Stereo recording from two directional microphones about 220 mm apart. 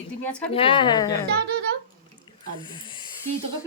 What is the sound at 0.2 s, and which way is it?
Speech, 5° left (ahead or behind).